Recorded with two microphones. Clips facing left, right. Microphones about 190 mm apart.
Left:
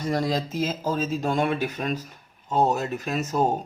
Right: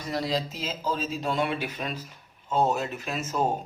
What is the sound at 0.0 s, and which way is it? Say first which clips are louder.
Speech: left 4 dB; 45° left (ahead or behind).